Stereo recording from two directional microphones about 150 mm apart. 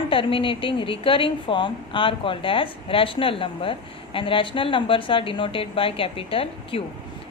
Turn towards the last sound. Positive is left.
turn(degrees=40)  # may be behind; listen again after turning